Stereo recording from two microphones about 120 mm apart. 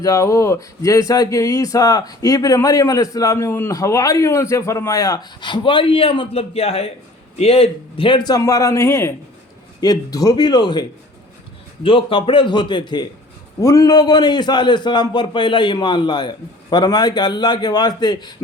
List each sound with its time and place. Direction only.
0.0 s a man's voice: 25° left (ahead or behind)
11.8 s a man's voice: 45° left (ahead or behind)
13.6 s a man's voice: 25° left (ahead or behind)